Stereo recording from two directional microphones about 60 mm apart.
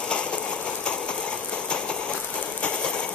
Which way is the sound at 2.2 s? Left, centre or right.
Left.